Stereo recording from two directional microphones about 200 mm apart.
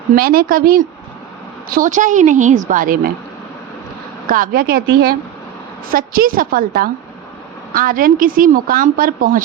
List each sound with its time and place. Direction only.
0.2 s a woman's voice: 45° right (ahead or behind)
4.3 s speech: 45° right (ahead or behind)